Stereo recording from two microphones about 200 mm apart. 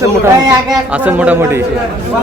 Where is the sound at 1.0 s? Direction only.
5° right (ahead or behind).